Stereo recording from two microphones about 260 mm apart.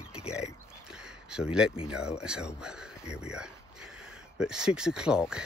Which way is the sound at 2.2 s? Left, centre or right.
Centre.